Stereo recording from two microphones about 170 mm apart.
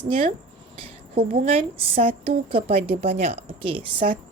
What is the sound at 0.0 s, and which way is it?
Speech, 35° right (ahead or behind).